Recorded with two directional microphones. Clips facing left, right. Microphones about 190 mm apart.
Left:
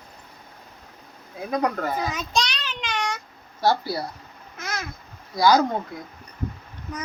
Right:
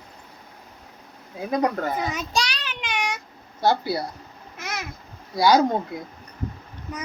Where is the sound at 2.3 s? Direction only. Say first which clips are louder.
Left 1 dB; 10° right (ahead or behind).